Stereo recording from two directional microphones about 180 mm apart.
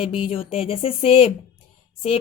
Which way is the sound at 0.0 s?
30° left (ahead or behind).